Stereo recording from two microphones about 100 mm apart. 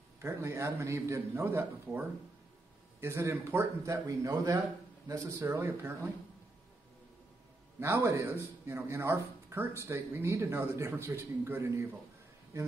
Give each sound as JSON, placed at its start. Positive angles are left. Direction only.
{"t": 0.2, "sound": "a man's voice", "side_deg": -25}
{"t": 7.8, "sound": "a man's voice", "side_deg": -30}